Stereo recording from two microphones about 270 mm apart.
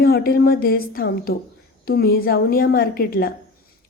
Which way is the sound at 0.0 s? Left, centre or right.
Left.